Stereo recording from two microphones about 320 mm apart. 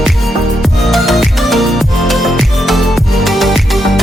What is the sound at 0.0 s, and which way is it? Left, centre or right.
Music, centre.